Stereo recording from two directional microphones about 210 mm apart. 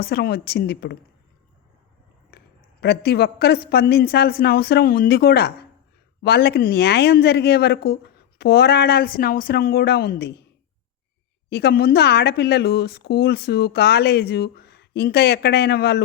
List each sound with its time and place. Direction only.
0.0 s a woman's voice: 50° left (ahead or behind)
2.8 s a woman's voice: 50° left (ahead or behind)
11.4 s a woman's voice: 50° left (ahead or behind)